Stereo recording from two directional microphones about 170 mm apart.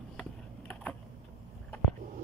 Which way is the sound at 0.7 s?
10° left (ahead or behind).